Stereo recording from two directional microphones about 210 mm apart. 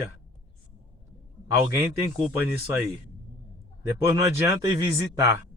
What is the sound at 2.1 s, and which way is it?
Speech, 10° right (ahead or behind).